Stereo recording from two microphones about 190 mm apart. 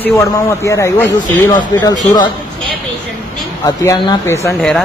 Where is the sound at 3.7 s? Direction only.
20° left (ahead or behind).